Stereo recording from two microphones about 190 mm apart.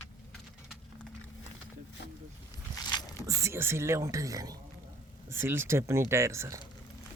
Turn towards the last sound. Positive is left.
turn(degrees=-15)  # may be behind; listen again after turning